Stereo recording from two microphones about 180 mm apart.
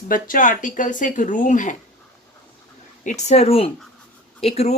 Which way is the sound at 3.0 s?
40° left (ahead or behind).